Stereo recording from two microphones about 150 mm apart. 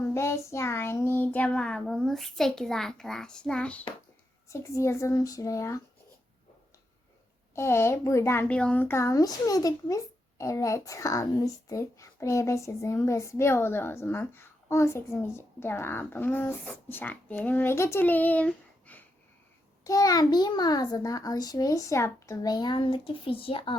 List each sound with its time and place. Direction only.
0.0 s child singing: 20° left (ahead or behind)
4.4 s a child's voice: 20° left (ahead or behind)
7.5 s speech: 15° left (ahead or behind)
19.8 s a child's voice: 25° left (ahead or behind)